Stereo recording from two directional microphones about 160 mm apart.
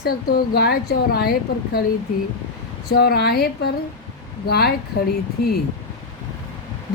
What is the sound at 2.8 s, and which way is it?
Speech, 80° left.